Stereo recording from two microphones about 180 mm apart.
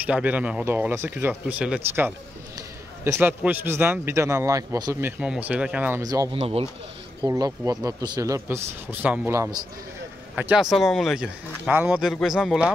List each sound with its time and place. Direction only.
0.0 s speech: 10° right (ahead or behind)
5.2 s speech: 5° right (ahead or behind)